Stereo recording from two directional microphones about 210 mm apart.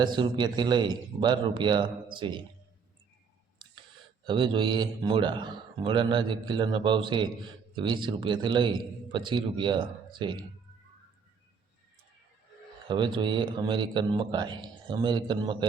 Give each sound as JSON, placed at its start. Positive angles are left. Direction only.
{"t": 0.0, "sound": "a man's voice", "side_deg": -20}
{"t": 4.3, "sound": "a man's voice", "side_deg": -25}
{"t": 12.9, "sound": "a man's voice", "side_deg": -20}